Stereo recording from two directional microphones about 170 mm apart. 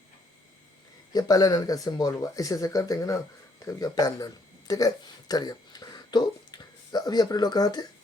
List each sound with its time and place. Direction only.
1.1 s speech: 20° left (ahead or behind)